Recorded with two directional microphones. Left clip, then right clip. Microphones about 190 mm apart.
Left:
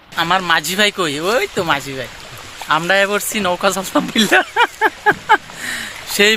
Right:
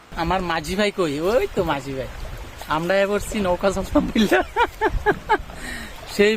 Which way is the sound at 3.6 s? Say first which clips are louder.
Left 4 dB; centre (ahead or behind).